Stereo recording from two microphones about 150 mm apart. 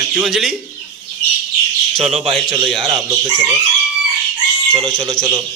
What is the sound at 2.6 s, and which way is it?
Speech, centre (ahead or behind).